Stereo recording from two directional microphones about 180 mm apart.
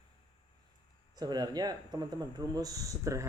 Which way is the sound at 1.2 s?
20° right (ahead or behind).